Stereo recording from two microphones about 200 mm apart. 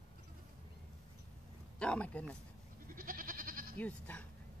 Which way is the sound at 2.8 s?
45° right (ahead or behind).